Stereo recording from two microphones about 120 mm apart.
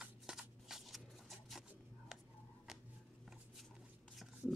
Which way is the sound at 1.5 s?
Centre (ahead or behind).